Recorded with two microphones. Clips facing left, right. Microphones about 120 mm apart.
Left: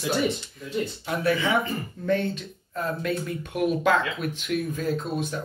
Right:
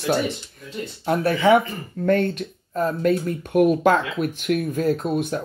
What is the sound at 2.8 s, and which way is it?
Speech, 45° right (ahead or behind).